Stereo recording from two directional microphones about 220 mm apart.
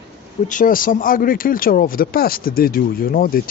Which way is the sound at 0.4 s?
40° left (ahead or behind).